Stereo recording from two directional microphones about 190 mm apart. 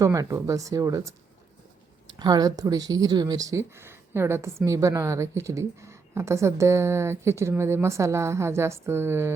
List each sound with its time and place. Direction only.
0.0 s speech: 15° right (ahead or behind)
2.1 s speech: 20° right (ahead or behind)